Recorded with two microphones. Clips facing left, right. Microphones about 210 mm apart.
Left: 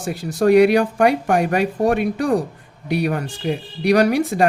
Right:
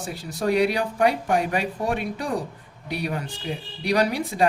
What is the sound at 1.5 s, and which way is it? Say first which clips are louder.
Speech: left 7 dB; 45° left (ahead or behind).